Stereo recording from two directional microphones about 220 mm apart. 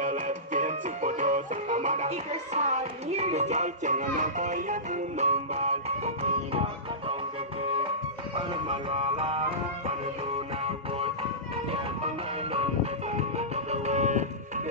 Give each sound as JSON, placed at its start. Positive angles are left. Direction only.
{"t": 0.0, "sound": "music", "side_deg": -35}
{"t": 8.4, "sound": "music", "side_deg": -25}
{"t": 10.6, "sound": "music", "side_deg": -25}